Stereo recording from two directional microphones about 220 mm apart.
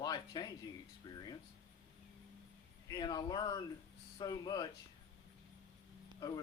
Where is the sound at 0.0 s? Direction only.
20° left (ahead or behind).